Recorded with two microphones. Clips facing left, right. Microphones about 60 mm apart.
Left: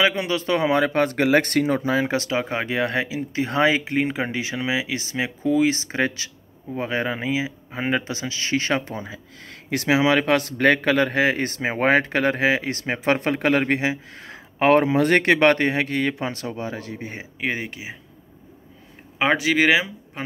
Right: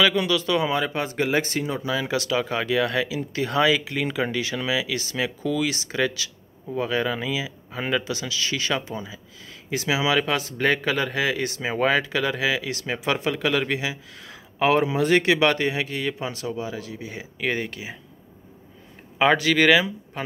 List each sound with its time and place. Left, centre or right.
0.0 s speech: left
1.8 s speech: left
17.4 s speech: centre
19.1 s speech: centre